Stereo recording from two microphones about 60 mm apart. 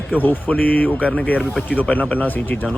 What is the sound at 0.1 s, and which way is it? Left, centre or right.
A man's voice, left.